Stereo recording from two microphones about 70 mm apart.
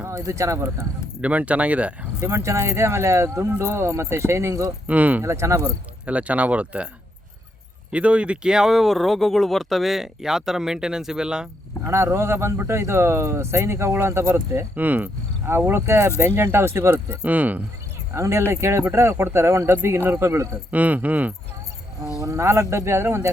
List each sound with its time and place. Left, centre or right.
0.3 s speech: right
1.2 s speech: centre
2.2 s speech: right
4.9 s speech: right
5.2 s speech: right
6.1 s speech: centre
7.9 s speech: centre
11.9 s speech: right
14.8 s speech: right
15.4 s speech: right
16.9 s speech: right
18.1 s speech: right
20.7 s speech: right
22.2 s speech: right